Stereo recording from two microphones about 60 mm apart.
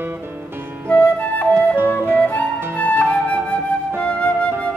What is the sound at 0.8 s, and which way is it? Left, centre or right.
Flute, left.